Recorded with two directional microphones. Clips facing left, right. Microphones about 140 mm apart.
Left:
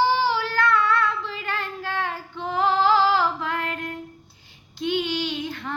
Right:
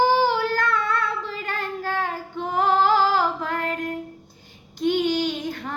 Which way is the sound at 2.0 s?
45° right (ahead or behind).